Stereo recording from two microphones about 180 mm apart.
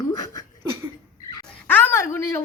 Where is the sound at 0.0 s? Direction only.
20° left (ahead or behind).